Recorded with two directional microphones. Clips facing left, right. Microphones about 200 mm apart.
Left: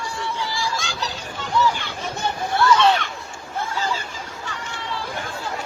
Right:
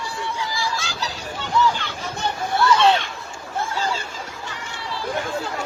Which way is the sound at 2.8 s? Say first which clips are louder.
Right 1 dB; 25° right (ahead or behind).